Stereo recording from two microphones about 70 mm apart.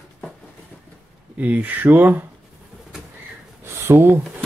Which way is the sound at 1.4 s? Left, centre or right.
Right.